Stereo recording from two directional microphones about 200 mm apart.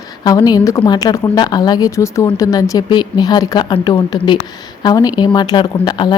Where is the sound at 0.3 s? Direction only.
20° left (ahead or behind).